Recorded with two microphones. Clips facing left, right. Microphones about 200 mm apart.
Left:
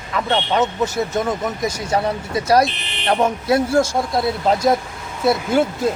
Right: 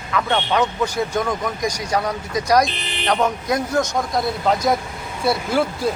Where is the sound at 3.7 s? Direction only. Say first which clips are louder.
Left 3 dB; 30° left (ahead or behind).